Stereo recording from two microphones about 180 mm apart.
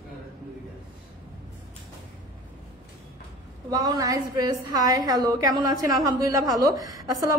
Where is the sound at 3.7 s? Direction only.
20° right (ahead or behind).